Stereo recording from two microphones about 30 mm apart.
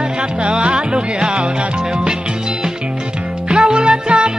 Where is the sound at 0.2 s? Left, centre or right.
Right.